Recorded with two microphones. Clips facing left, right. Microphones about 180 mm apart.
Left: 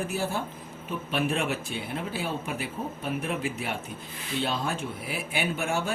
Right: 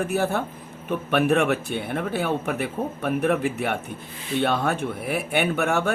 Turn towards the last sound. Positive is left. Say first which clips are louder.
# right 6 dB
turn(degrees=-65)  # may be behind; listen again after turning